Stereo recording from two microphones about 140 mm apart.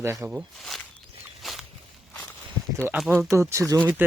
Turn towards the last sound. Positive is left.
turn(degrees=-15)  # may be behind; listen again after turning